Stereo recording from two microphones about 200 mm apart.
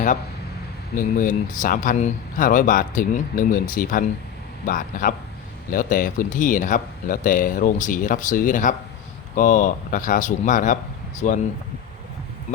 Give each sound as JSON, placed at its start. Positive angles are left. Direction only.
{"t": 0.9, "sound": "speech", "side_deg": 40}
{"t": 12.5, "sound": "speech", "side_deg": 40}